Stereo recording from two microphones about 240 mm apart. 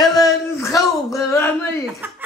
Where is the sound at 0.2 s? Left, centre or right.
Centre.